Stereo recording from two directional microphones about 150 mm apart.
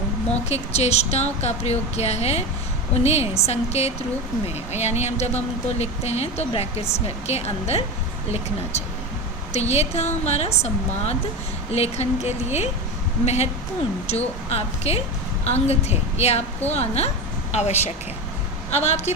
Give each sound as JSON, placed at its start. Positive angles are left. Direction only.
{"t": 0.3, "sound": "speech", "side_deg": 45}